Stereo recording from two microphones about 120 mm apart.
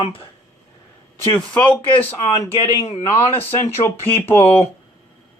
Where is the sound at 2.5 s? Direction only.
55° left (ahead or behind).